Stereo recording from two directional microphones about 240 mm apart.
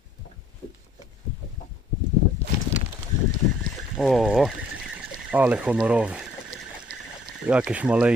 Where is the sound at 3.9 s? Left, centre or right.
Centre.